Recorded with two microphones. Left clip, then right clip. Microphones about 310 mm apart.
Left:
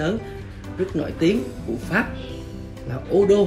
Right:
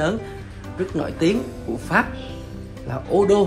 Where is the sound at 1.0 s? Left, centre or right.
Centre.